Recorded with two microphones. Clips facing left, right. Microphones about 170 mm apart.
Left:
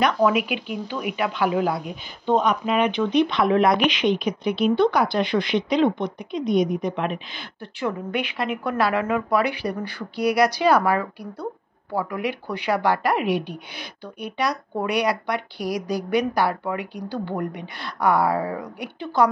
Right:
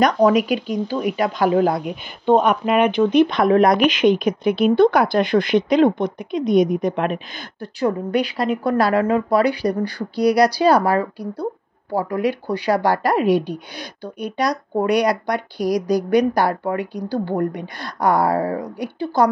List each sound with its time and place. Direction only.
0.0 s speech: 40° right (ahead or behind)
1.9 s speech: 55° right (ahead or behind)
7.6 s speech: 40° right (ahead or behind)